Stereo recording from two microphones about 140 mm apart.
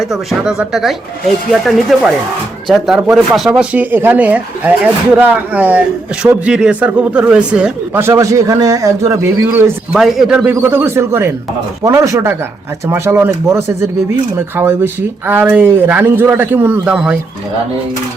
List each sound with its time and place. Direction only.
0.0 s speech: centre (ahead or behind); by 9.7 s 20° right (ahead or behind)
9.9 s speech: centre (ahead or behind)